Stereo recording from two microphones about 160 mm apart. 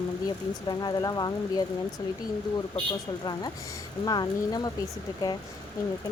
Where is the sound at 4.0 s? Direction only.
25° left (ahead or behind).